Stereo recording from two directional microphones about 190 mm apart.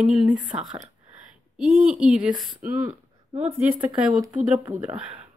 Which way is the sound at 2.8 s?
35° right (ahead or behind).